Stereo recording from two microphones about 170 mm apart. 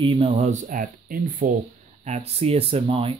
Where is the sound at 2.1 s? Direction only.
35° right (ahead or behind).